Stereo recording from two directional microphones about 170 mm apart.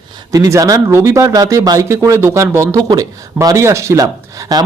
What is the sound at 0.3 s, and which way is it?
Speech, 20° right (ahead or behind).